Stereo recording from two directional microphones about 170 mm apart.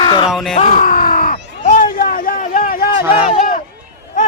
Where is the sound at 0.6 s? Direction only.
45° left (ahead or behind).